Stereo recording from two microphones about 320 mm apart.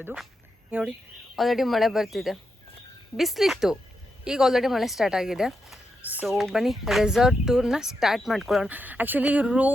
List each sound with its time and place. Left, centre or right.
0.0 s speech: centre